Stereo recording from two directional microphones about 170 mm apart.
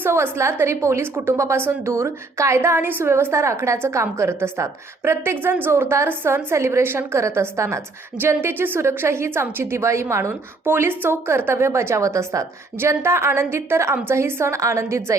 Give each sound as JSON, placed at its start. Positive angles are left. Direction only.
{"t": 0.0, "sound": "a woman's voice", "side_deg": -15}